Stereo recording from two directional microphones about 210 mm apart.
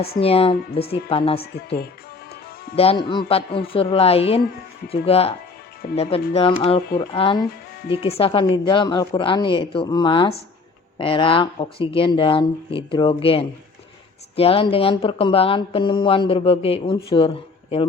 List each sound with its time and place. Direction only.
0.2 s speech: 30° left (ahead or behind)
1.5 s speech: 45° left (ahead or behind)
2.7 s speech: 25° left (ahead or behind)